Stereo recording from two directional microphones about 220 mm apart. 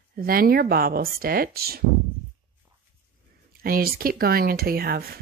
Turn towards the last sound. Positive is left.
turn(degrees=-45)  # may be behind; listen again after turning